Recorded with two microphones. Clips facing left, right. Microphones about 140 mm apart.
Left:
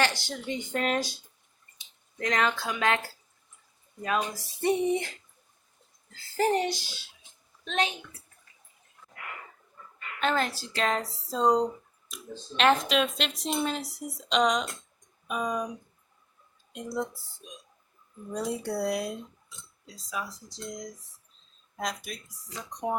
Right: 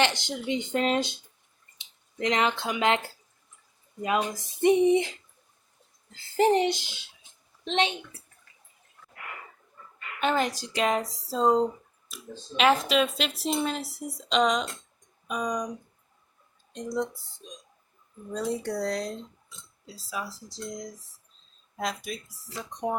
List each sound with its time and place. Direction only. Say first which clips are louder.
0.0 s speech: right 2 dB; 20° right (ahead or behind)
4.0 s speech: right 2 dB; 20° right (ahead or behind)
6.3 s a woman's voice: right 4 dB; 20° right (ahead or behind)
10.2 s a woman's voice: right 2 dB; 10° right (ahead or behind)
16.7 s speech: right 2 dB; 5° left (ahead or behind)
19.9 s speech: right 1 dB; 5° right (ahead or behind)